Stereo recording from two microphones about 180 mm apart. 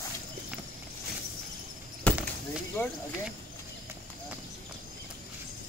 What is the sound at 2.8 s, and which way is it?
Speech, 10° left (ahead or behind).